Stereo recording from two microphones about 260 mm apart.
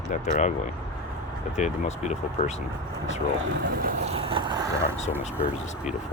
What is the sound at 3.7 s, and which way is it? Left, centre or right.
Boat, right.